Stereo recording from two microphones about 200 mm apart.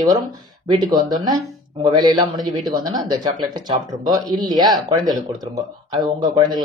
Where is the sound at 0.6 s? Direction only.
20° right (ahead or behind).